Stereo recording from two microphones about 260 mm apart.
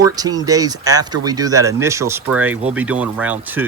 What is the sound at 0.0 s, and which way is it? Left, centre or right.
Speech, centre.